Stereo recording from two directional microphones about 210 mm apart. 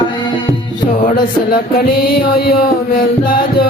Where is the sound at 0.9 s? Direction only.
40° left (ahead or behind).